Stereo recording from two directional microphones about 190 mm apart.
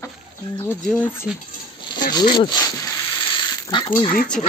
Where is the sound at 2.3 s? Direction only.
20° left (ahead or behind).